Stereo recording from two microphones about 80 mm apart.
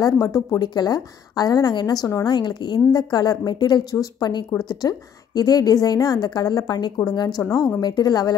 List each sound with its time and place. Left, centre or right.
0.0 s a woman's voice: left
7.2 s a woman's voice: left